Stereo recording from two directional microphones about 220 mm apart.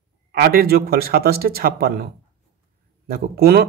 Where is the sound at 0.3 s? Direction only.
45° right (ahead or behind).